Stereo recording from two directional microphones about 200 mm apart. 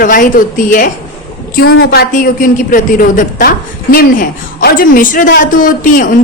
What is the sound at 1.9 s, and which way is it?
A woman's voice, 50° left (ahead or behind).